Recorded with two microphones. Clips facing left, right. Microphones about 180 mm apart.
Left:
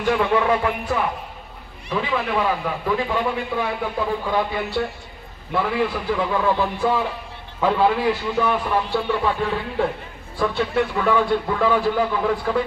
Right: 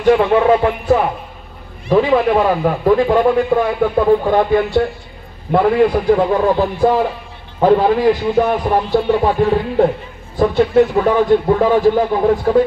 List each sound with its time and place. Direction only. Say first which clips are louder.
0.0 s a man's voice: right 8 dB; 35° right (ahead or behind)